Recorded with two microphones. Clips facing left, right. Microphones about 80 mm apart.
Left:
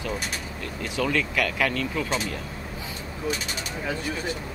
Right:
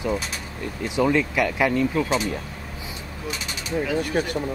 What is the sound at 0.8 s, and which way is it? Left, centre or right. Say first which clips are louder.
Speech: right 5 dB; right.